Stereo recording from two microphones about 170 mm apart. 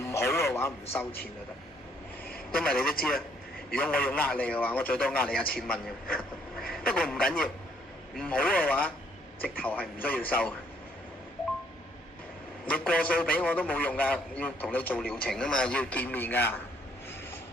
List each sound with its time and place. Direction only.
0.0 s radio: 15° left (ahead or behind)
2.2 s a sound: 60° left (ahead or behind)
2.6 s a man's voice: 5° left (ahead or behind)
12.6 s a man's voice: 10° left (ahead or behind)